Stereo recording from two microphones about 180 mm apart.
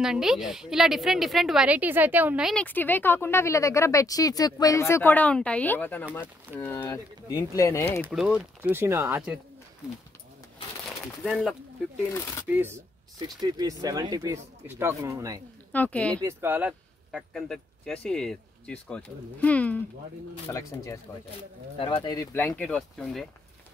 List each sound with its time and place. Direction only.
0.0 s speech: 5° right (ahead or behind)
2.6 s speech: 10° left (ahead or behind)
8.1 s speech: 5° right (ahead or behind)
11.2 s speech: centre (ahead or behind)
12.1 s speech: 15° left (ahead or behind)
12.4 s speech: 10° right (ahead or behind)
15.7 s speech: 10° left (ahead or behind)
16.2 s speech: 15° right (ahead or behind); by 21.0 s 15° left (ahead or behind)
21.7 s speech: 25° left (ahead or behind)
22.6 s speech: 5° left (ahead or behind)